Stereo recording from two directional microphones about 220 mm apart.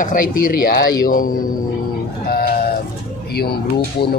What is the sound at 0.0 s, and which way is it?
A man's voice, 40° left (ahead or behind).